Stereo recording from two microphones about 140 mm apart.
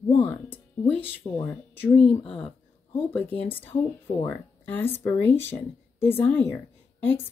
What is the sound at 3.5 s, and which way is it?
Speech, 15° left (ahead or behind).